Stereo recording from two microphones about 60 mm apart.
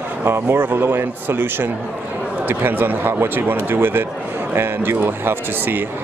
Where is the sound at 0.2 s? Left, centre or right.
Right.